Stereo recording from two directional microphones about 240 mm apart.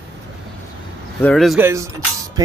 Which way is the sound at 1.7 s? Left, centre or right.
Centre.